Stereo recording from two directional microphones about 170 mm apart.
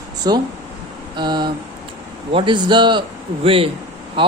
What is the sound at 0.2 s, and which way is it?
Speech, 25° right (ahead or behind).